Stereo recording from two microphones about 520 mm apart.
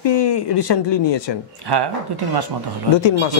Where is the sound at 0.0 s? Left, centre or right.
Left.